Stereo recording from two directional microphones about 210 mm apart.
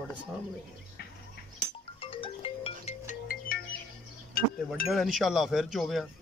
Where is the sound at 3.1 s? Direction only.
45° left (ahead or behind).